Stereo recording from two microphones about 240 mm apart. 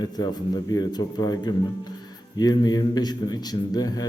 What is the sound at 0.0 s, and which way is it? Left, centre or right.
A man's voice, centre.